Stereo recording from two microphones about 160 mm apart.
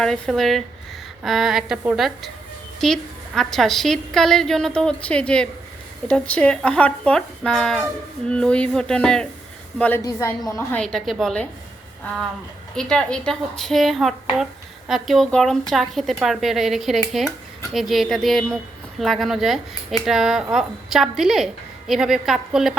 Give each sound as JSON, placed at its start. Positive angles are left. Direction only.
{"t": 0.0, "sound": "a woman's voice", "side_deg": 5}
{"t": 10.0, "sound": "speech", "side_deg": 20}
{"t": 12.7, "sound": "speech", "side_deg": 5}